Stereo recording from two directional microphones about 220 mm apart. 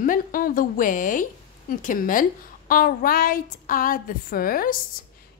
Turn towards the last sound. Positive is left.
turn(degrees=40)  # may be behind; listen again after turning